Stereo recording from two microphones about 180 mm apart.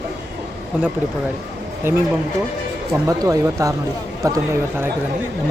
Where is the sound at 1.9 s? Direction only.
15° right (ahead or behind).